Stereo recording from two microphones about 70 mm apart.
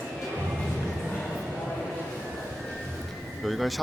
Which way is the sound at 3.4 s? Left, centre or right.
Centre.